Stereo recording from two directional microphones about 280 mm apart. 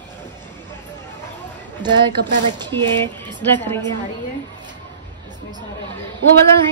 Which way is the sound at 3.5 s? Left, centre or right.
Centre.